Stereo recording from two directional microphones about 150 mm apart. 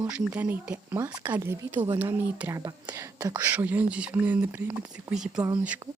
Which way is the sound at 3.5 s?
10° right (ahead or behind).